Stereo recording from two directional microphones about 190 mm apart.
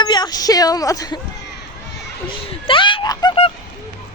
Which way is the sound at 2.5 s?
25° left (ahead or behind).